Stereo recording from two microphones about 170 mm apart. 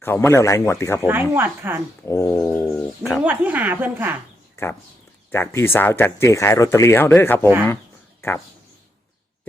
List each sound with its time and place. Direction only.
0.0 s speech: 15° left (ahead or behind)
1.0 s a woman's voice: 10° right (ahead or behind)
2.0 s speech: 15° left (ahead or behind)
3.0 s a woman's voice: 5° right (ahead or behind)
4.6 s speech: 15° left (ahead or behind)